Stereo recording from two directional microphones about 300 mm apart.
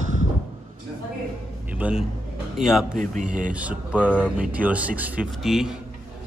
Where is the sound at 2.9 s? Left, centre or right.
Right.